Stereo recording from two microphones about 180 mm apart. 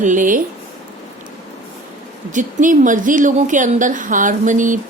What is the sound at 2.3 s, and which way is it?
A woman's voice, 45° right (ahead or behind).